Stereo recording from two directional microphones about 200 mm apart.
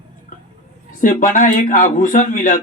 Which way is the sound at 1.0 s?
40° left (ahead or behind).